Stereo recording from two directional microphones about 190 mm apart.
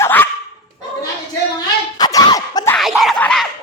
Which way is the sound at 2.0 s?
20° left (ahead or behind).